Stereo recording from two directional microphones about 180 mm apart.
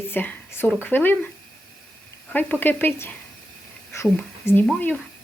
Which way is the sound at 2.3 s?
10° left (ahead or behind).